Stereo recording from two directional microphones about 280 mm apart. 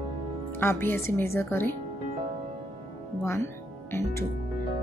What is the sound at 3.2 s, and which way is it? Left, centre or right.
Speech, centre.